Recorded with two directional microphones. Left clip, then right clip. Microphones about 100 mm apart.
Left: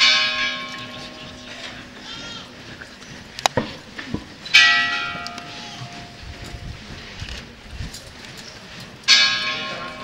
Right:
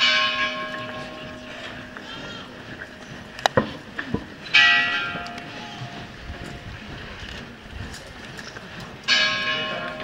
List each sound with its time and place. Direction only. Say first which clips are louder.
0.0 s church bell: left 3 dB; 25° left (ahead or behind)
1.6 s sheep: even; 25° left (ahead or behind)
3.3 s church bell: even; 25° left (ahead or behind)
9.0 s church bell: left 4 dB; 25° left (ahead or behind)